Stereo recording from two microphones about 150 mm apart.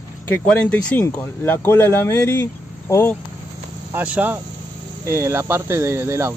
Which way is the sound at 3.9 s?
10° right (ahead or behind).